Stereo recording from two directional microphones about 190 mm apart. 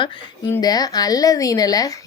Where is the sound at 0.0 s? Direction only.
25° left (ahead or behind).